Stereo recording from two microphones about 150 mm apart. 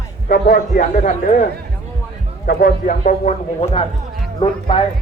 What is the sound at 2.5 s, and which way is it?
Speech, 75° left (ahead or behind).